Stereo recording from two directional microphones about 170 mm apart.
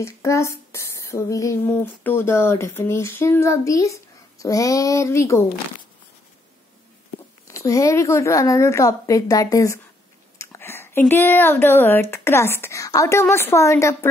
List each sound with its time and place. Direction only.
0.0 s speech: 15° left (ahead or behind)
7.4 s a woman's voice: 20° left (ahead or behind)